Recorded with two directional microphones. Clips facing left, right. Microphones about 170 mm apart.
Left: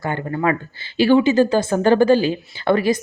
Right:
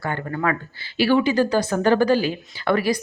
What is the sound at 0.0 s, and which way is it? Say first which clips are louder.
Speech: left 3 dB; 20° left (ahead or behind).